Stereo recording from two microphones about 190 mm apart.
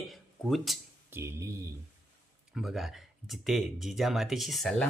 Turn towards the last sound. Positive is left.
turn(degrees=0)  # may be behind; listen again after turning